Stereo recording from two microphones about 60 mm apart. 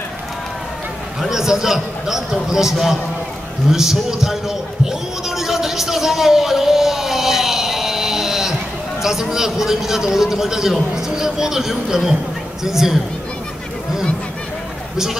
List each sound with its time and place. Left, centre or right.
1.2 s a man's voice: centre
5.3 s a sound: centre
9.0 s a man's voice: centre